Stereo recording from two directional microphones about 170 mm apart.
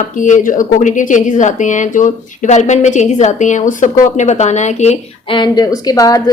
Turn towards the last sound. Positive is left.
turn(degrees=20)  # may be behind; listen again after turning